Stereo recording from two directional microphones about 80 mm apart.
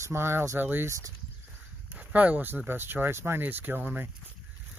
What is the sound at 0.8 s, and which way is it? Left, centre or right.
Speech, right.